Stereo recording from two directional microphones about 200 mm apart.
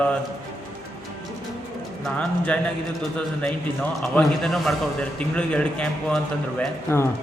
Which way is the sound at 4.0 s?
Centre (ahead or behind).